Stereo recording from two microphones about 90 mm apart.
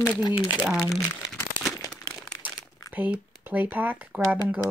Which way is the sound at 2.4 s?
15° right (ahead or behind).